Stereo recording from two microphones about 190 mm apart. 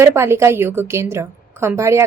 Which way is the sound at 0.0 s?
15° right (ahead or behind).